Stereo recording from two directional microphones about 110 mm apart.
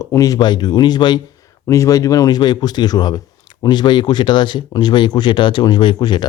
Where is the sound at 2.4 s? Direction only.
40° left (ahead or behind).